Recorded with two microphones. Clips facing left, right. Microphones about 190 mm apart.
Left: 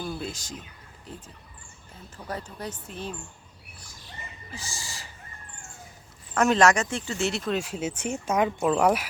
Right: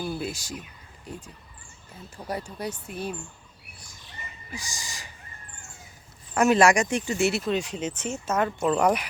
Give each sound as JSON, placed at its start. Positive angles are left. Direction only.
{"t": 0.0, "sound": "a sound", "side_deg": -5}
{"t": 1.1, "sound": "speech", "side_deg": -15}
{"t": 4.5, "sound": "speech", "side_deg": -15}
{"t": 6.3, "sound": "speech", "side_deg": -10}